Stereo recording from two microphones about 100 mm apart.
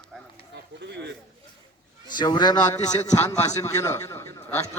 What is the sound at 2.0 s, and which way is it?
A man's voice, 45° left (ahead or behind).